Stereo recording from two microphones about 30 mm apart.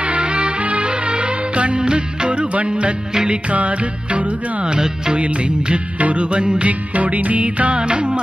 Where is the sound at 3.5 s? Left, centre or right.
Right.